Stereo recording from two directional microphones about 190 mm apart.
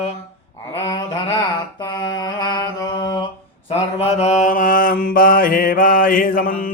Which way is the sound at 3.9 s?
35° left (ahead or behind).